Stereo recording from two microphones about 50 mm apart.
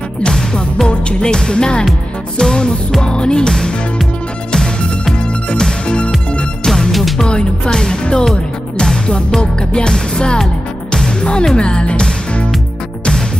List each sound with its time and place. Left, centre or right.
0.2 s music: centre
6.9 s music: centre
7.2 s speech: centre
8.7 s music: centre